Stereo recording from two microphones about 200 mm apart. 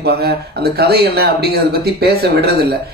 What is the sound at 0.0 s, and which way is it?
Speech, 55° right (ahead or behind).